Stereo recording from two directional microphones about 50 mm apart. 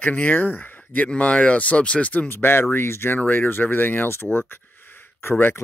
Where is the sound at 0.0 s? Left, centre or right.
Left.